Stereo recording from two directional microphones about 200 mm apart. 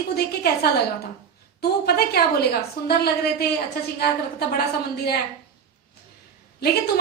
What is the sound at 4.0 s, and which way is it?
Speech, 50° left (ahead or behind).